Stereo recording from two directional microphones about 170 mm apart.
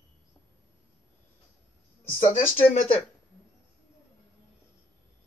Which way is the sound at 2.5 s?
50° left (ahead or behind).